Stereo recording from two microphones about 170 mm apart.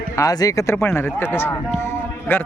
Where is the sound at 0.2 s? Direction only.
20° left (ahead or behind).